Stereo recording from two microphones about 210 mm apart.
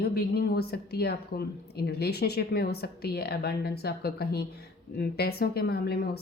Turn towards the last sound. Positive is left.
turn(degrees=50)  # may be behind; listen again after turning